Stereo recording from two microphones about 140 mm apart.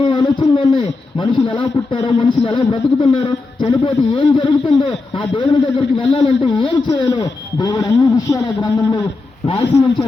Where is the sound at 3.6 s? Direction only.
35° left (ahead or behind).